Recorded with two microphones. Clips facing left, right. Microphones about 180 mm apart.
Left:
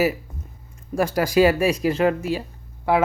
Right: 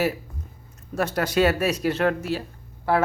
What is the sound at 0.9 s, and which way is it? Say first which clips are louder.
Speech: left 4 dB; 10° left (ahead or behind).